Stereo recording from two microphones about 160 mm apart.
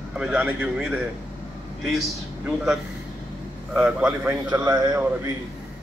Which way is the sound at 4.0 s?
10° right (ahead or behind).